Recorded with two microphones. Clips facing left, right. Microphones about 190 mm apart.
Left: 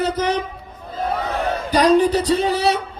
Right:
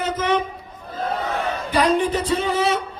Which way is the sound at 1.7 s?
40° left (ahead or behind).